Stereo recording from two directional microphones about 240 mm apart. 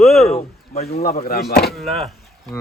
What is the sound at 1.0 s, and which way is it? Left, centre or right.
Speech, left.